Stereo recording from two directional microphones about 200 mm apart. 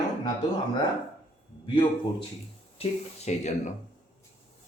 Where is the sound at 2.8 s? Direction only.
35° left (ahead or behind).